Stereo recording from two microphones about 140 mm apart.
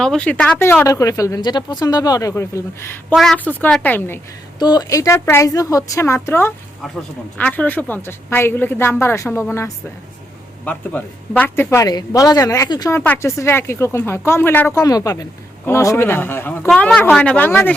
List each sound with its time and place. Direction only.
0.0 s speech: 5° left (ahead or behind)
3.1 s speech: centre (ahead or behind)
4.6 s speech: 30° left (ahead or behind)
6.8 s speech: centre (ahead or behind)
7.3 s speech: 10° left (ahead or behind); by 12.9 s 30° left (ahead or behind)
12.9 s speech: 15° left (ahead or behind)